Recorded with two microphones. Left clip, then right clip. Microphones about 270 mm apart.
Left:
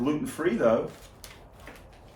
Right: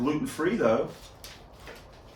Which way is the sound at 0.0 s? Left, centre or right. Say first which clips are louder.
Even; centre.